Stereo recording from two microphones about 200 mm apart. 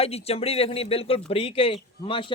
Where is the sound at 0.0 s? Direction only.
30° left (ahead or behind).